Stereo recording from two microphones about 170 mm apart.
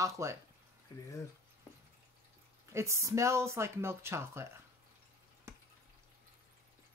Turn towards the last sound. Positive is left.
turn(degrees=-15)  # may be behind; listen again after turning